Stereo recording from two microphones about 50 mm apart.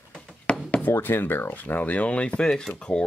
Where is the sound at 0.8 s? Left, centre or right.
Left.